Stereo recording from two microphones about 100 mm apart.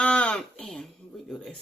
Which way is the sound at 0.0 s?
10° left (ahead or behind).